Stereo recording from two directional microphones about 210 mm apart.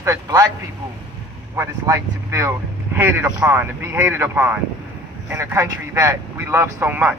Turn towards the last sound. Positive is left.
turn(degrees=-10)  # may be behind; listen again after turning